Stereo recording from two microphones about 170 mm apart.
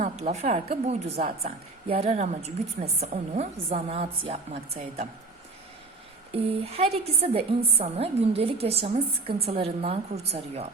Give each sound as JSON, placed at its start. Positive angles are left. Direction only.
{"t": 0.0, "sound": "a woman's voice", "side_deg": -40}
{"t": 6.3, "sound": "a woman's voice", "side_deg": -35}